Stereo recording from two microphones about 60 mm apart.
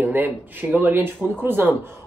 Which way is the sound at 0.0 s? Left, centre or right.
Right.